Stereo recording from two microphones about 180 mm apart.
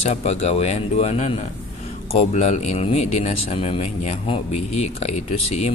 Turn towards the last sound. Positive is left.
turn(degrees=40)  # may be behind; listen again after turning